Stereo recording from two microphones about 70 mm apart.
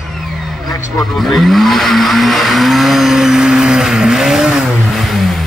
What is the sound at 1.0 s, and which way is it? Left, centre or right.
Vehicle, centre.